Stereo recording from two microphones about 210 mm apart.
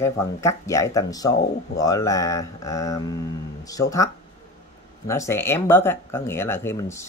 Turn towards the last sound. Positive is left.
turn(degrees=15)  # may be behind; listen again after turning